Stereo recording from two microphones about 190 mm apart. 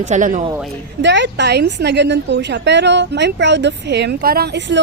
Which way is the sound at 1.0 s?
65° right (ahead or behind).